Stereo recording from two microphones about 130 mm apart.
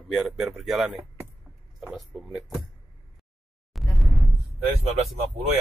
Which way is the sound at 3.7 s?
Centre (ahead or behind).